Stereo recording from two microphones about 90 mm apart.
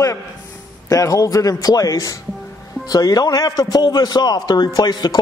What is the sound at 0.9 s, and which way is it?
A man's voice, 40° left (ahead or behind).